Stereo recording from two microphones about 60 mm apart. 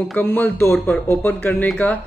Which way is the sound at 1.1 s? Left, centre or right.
Left.